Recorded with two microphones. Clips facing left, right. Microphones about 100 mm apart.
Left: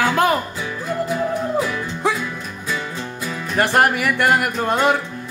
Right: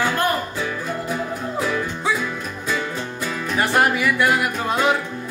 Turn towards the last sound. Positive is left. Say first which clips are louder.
# left 2 dB
turn(degrees=50)  # may be behind; listen again after turning